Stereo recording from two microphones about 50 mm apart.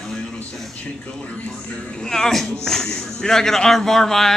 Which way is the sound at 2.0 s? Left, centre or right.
Centre.